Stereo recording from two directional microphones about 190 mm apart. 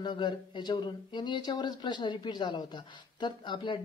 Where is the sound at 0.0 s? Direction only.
25° left (ahead or behind).